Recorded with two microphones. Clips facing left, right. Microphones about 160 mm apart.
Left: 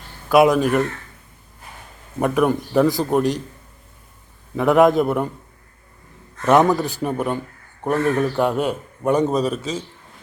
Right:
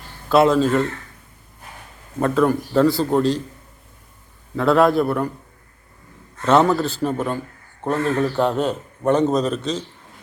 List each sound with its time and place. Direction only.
0.3 s speech: 15° left (ahead or behind)
2.1 s speech: 15° left (ahead or behind)
4.5 s speech: 15° left (ahead or behind)
6.4 s speech: 15° left (ahead or behind)